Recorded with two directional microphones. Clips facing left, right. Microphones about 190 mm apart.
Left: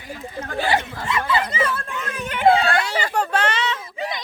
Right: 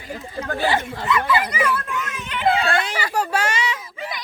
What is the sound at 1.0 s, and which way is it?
Speech, 25° left (ahead or behind).